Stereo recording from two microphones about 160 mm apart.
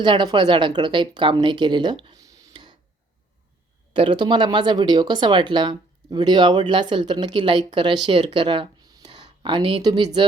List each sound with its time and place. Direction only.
0.0 s a woman's voice: 30° right (ahead or behind)
3.9 s speech: 30° right (ahead or behind)